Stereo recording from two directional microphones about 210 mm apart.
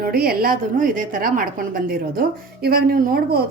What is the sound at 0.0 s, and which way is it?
A woman's voice, 45° right (ahead or behind).